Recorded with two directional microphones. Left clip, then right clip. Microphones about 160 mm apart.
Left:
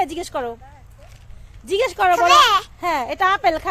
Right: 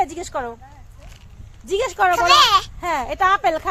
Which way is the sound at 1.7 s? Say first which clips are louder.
Left 1 dB; 20° left (ahead or behind).